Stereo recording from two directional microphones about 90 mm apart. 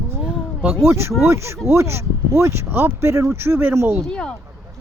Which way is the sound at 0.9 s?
30° right (ahead or behind).